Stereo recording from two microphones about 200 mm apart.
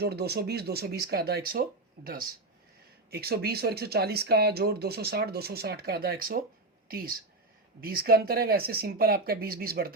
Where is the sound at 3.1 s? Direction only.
50° right (ahead or behind).